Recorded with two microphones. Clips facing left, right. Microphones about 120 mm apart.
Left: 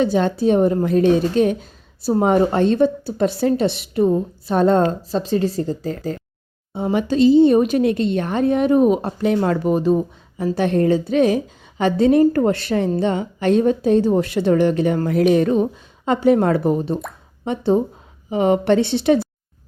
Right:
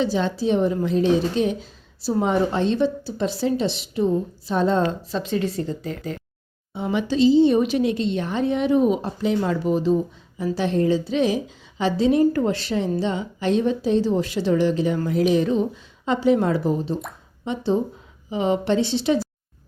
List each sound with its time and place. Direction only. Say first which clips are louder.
0.0 s a woman's voice: left 5 dB; 50° left (ahead or behind)